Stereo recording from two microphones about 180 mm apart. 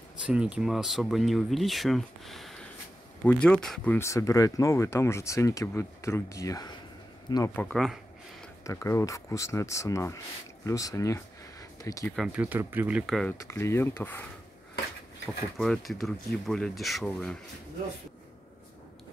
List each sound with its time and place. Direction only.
0.3 s speech: 5° right (ahead or behind); by 7.5 s 20° left (ahead or behind)
7.5 s speech: 5° left (ahead or behind)
8.6 s speech: 15° left (ahead or behind)
12.2 s speech: 5° right (ahead or behind)
13.0 s speech: centre (ahead or behind)
13.4 s speech: 15° left (ahead or behind)
15.2 s speech: 5° left (ahead or behind)